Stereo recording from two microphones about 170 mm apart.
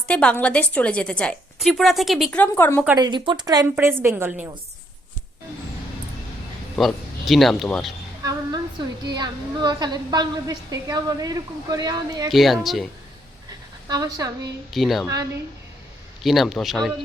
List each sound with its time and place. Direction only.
0.1 s a woman's voice: 5° left (ahead or behind)
2.4 s a woman's voice: 10° left (ahead or behind)
3.0 s a woman's voice: 25° right (ahead or behind); by 4.4 s 10° right (ahead or behind)
6.7 s speech: centre (ahead or behind)
8.2 s a sound: 20° right (ahead or behind)
9.0 s a woman's voice: 25° right (ahead or behind)
12.3 s speech: centre (ahead or behind)
13.8 s a woman's voice: 20° right (ahead or behind)
14.7 s speech: centre (ahead or behind)
16.2 s speech: centre (ahead or behind)